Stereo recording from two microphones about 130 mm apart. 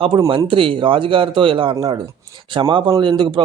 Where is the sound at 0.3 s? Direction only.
40° right (ahead or behind).